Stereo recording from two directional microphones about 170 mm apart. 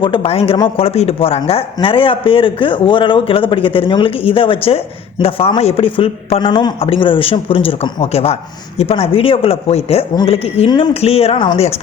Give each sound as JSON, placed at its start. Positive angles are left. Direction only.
{"t": 0.0, "sound": "a man's voice", "side_deg": 30}